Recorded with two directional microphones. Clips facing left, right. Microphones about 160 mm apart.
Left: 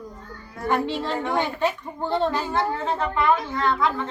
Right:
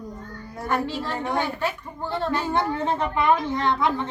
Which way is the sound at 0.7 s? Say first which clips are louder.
Left 2 dB; 20° left (ahead or behind).